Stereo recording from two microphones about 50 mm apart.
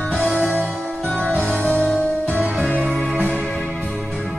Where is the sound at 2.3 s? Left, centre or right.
Left.